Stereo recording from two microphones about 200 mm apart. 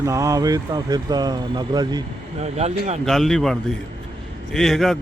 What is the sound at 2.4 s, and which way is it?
Speech, 30° right (ahead or behind).